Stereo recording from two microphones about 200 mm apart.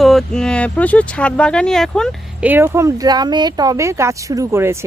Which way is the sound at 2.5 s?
10° right (ahead or behind).